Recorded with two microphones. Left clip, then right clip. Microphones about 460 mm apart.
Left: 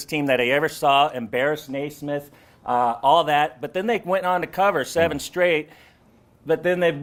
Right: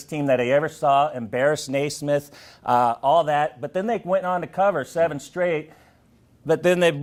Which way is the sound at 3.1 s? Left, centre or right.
Right.